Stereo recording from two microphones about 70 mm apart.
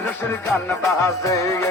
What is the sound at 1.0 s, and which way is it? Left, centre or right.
Music, left.